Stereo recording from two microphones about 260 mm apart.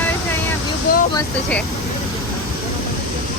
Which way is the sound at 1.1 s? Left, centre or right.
Centre.